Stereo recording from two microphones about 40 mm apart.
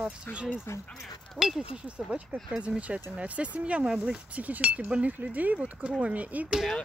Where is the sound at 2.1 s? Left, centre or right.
Right.